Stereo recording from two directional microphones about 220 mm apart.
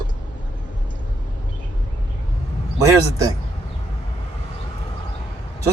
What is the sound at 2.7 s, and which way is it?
Speech, 15° right (ahead or behind).